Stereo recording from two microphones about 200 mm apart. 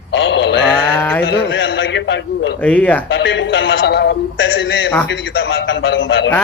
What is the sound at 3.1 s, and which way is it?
A man's voice, 60° left (ahead or behind).